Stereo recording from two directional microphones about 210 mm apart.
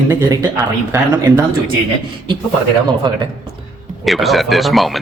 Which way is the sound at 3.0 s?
20° right (ahead or behind).